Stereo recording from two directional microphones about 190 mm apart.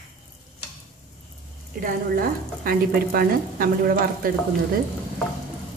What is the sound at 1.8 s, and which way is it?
A woman's voice, 50° right (ahead or behind).